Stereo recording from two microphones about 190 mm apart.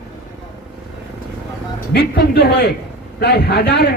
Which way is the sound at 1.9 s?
60° left (ahead or behind).